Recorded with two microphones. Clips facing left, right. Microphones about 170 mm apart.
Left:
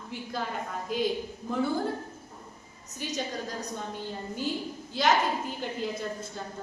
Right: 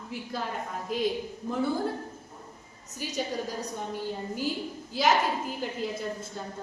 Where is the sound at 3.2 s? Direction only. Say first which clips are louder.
Right 4 dB; 10° right (ahead or behind).